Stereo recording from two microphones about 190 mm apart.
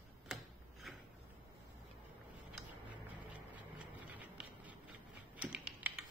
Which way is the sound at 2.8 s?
10° right (ahead or behind).